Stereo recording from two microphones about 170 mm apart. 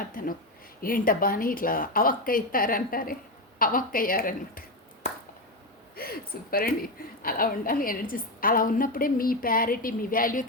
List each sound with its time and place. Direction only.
0.2 s speech: 55° left (ahead or behind)
6.0 s speech: 60° left (ahead or behind)